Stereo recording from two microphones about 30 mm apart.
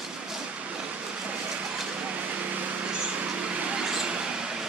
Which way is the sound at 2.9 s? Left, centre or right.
Right.